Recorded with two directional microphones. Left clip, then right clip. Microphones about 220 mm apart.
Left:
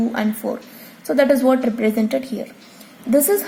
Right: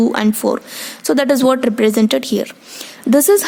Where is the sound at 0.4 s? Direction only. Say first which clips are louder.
Right 8 dB; 55° right (ahead or behind).